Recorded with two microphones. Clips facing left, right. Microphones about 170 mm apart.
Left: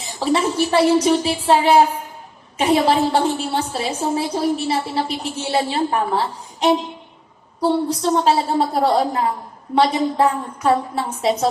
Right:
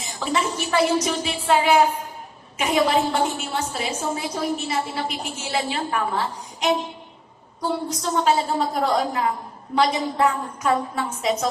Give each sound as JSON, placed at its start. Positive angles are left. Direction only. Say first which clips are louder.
{"t": 0.0, "sound": "a woman's voice", "louder": "left 5 dB", "side_deg": 30}